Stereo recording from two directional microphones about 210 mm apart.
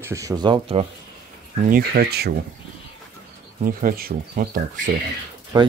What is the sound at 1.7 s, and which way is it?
Speech, 45° right (ahead or behind).